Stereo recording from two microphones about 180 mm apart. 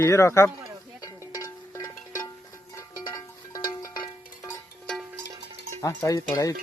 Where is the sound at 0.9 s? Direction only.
20° left (ahead or behind).